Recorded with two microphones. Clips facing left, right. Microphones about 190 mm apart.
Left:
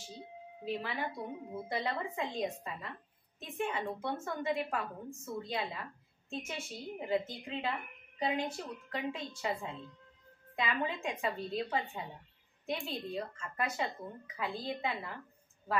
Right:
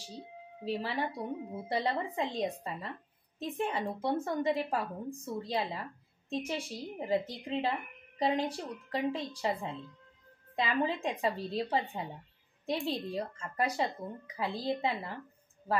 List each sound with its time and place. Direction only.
0.7 s speech: 35° right (ahead or behind)